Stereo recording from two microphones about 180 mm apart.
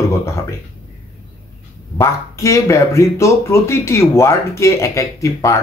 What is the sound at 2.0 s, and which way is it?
Speech, 15° left (ahead or behind).